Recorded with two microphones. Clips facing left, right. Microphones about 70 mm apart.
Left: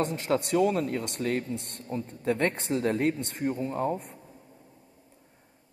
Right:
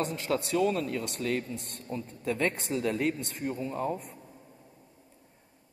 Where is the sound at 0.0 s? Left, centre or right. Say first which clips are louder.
Left 3 dB; left.